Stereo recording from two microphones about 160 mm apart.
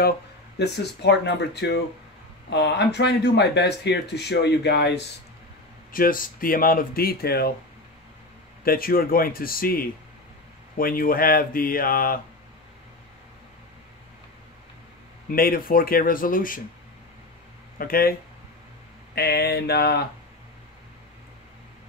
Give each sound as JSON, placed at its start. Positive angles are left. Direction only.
{"t": 0.6, "sound": "speech", "side_deg": 90}
{"t": 5.9, "sound": "speech", "side_deg": 60}
{"t": 8.6, "sound": "speech", "side_deg": 65}
{"t": 15.3, "sound": "speech", "side_deg": 65}
{"t": 17.7, "sound": "speech", "side_deg": 65}
{"t": 19.1, "sound": "a sound", "side_deg": 85}